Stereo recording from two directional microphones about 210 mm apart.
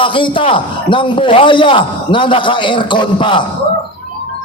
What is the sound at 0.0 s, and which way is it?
A man's voice, 25° left (ahead or behind).